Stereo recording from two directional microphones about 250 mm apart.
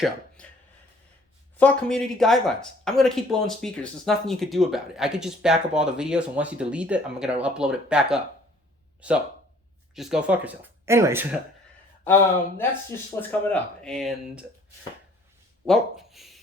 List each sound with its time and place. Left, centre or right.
0.4 s chopping: centre
1.5 s speech: centre
12.0 s speech: centre
15.6 s speech: centre